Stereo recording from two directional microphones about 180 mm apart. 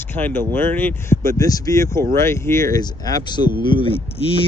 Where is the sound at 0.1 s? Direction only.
10° left (ahead or behind).